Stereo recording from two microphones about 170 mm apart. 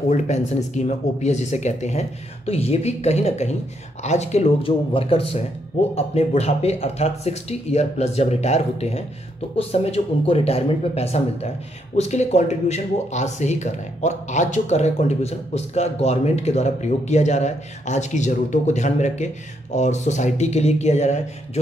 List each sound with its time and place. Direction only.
0.1 s speech: 40° left (ahead or behind)